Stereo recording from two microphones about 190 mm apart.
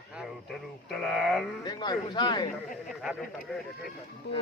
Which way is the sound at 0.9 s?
Centre (ahead or behind).